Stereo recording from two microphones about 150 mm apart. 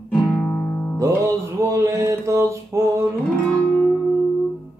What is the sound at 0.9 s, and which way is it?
Music, 20° right (ahead or behind).